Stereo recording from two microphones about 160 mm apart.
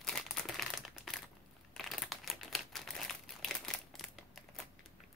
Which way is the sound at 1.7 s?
Centre (ahead or behind).